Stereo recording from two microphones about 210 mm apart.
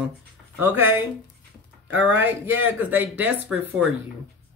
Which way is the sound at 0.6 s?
10° right (ahead or behind).